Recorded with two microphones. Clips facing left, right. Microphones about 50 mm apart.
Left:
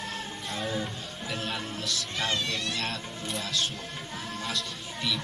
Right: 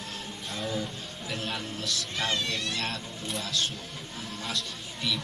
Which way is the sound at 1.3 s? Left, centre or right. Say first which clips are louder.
Even; centre.